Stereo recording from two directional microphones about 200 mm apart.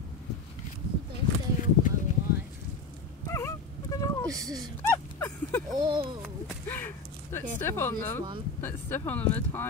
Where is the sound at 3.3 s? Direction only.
15° left (ahead or behind).